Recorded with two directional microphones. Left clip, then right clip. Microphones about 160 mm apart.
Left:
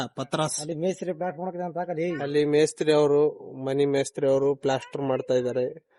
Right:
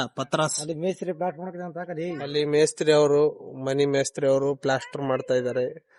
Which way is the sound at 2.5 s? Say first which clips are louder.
Right 3 dB; centre (ahead or behind).